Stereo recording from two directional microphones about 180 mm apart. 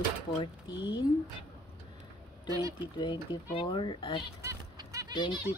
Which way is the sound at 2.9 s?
30° left (ahead or behind).